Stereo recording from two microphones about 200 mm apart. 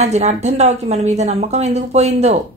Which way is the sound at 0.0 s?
35° right (ahead or behind).